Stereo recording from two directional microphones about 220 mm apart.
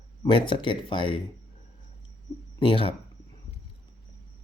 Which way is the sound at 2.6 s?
25° left (ahead or behind).